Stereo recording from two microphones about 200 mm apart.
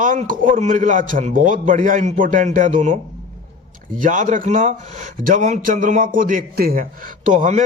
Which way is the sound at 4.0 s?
40° right (ahead or behind).